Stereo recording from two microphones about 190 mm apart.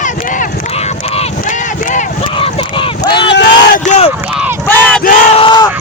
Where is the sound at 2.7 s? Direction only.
25° left (ahead or behind).